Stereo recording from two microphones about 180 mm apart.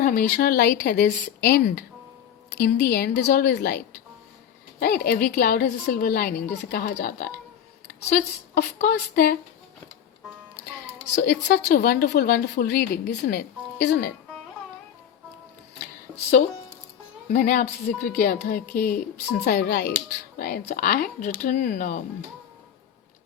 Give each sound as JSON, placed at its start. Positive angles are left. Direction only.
{"t": 0.0, "sound": "a woman's voice", "side_deg": 50}
{"t": 4.8, "sound": "a woman's voice", "side_deg": 60}
{"t": 11.1, "sound": "a woman's voice", "side_deg": 70}
{"t": 17.3, "sound": "a woman's voice", "side_deg": 50}
{"t": 19.5, "sound": "a woman's voice", "side_deg": 60}